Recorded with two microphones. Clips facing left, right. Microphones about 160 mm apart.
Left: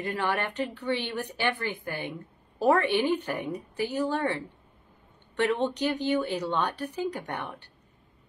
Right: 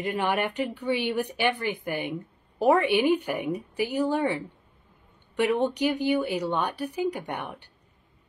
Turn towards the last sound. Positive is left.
turn(degrees=-15)  # may be behind; listen again after turning